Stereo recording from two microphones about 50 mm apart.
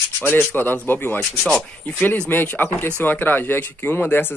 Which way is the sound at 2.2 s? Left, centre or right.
Left.